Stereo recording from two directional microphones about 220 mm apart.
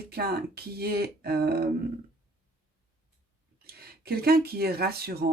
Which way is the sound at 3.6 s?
45° right (ahead or behind).